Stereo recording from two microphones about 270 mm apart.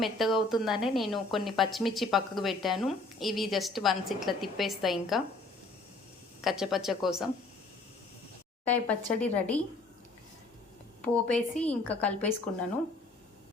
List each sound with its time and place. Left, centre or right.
0.0 s speech: centre
6.4 s speech: centre
8.6 s speech: centre
11.0 s speech: centre